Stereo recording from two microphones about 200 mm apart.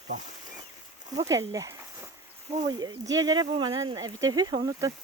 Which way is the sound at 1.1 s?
15° right (ahead or behind).